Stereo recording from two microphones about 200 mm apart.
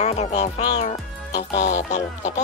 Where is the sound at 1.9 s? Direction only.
35° left (ahead or behind).